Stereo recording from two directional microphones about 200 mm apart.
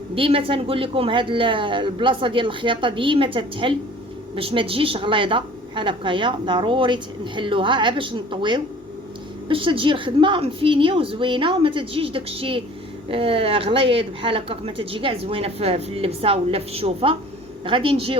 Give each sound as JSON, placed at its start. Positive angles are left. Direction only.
{"t": 0.1, "sound": "a woman's voice", "side_deg": -25}